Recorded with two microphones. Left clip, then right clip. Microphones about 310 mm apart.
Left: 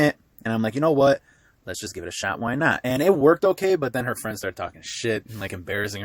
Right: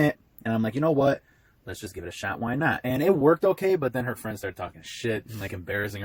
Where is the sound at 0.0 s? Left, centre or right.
Left.